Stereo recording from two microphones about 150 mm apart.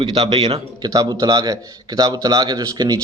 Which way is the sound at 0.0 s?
35° right (ahead or behind).